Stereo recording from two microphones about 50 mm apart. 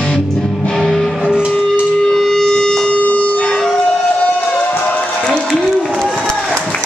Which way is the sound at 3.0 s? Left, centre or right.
Left.